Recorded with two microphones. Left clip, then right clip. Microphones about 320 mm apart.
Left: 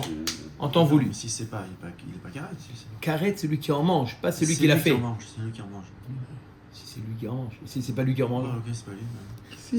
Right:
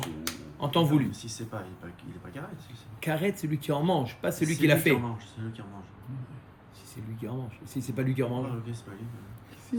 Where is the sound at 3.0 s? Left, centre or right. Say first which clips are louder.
Left 3 dB; centre.